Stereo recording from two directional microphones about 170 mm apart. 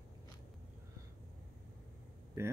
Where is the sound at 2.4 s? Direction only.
15° right (ahead or behind).